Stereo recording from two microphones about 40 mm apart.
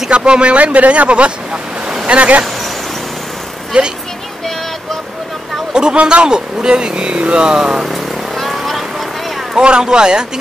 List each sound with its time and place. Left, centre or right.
0.1 s speech: right
3.7 s speech: right
5.7 s speech: right
7.4 s speech: centre
7.9 s vehicle: centre
9.6 s speech: centre